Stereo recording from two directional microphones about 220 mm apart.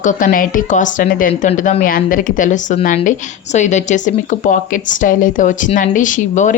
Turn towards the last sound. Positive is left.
turn(degrees=35)  # may be behind; listen again after turning